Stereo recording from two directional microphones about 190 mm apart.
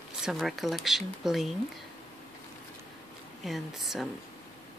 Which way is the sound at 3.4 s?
Centre (ahead or behind).